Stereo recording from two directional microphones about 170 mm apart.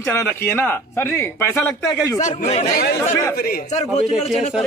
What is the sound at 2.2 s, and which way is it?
Speech, 40° left (ahead or behind).